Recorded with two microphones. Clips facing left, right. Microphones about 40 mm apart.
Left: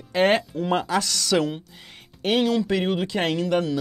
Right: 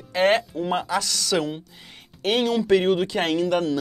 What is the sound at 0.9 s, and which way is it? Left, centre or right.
Speech, left.